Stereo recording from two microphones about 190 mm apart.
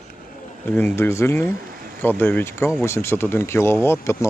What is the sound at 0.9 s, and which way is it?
Speech, 15° left (ahead or behind).